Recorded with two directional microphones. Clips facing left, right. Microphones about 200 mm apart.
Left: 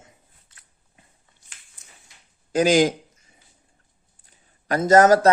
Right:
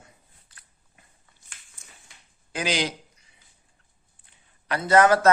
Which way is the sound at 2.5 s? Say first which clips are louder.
Left 10 dB; 45° left (ahead or behind).